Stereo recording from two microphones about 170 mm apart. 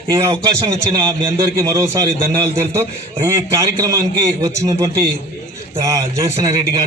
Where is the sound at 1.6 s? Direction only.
20° right (ahead or behind).